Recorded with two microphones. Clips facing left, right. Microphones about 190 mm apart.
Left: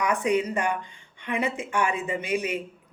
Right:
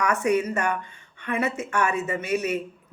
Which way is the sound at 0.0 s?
15° left (ahead or behind).